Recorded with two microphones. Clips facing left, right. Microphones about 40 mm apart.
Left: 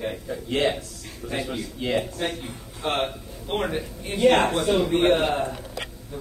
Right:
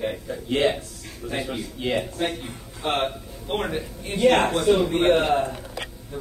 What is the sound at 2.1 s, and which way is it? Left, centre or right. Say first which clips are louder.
Speech: right 2 dB; centre.